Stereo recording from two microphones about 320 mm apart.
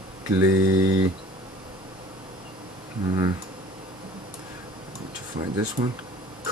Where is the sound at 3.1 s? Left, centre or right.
Centre.